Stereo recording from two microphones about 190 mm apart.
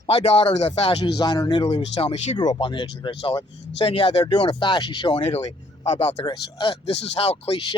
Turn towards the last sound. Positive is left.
turn(degrees=30)  # may be behind; listen again after turning